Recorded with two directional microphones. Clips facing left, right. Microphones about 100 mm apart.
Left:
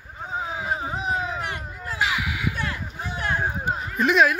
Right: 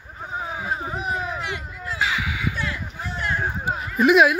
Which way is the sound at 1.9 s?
5° left (ahead or behind).